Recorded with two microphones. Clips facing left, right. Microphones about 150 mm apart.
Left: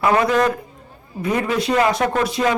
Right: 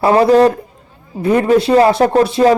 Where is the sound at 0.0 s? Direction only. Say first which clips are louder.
Right 7 dB; 30° right (ahead or behind).